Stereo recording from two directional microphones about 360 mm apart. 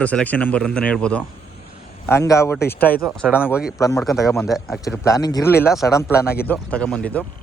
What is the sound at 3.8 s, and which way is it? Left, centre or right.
Speech, centre.